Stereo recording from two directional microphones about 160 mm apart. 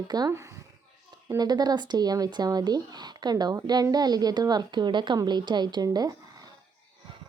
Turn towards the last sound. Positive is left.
turn(degrees=-25)  # may be behind; listen again after turning